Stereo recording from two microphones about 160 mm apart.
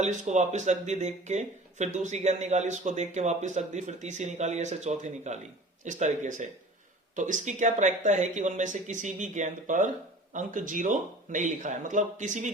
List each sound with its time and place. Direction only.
0.0 s speech: 45° right (ahead or behind)